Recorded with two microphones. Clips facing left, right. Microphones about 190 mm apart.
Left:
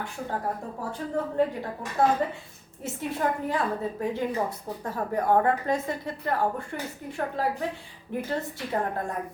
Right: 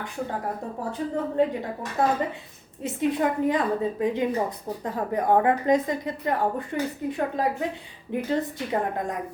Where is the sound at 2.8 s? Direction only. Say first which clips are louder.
Right 4 dB; 20° right (ahead or behind).